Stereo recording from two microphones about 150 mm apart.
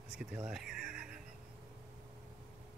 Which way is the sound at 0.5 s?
5° right (ahead or behind).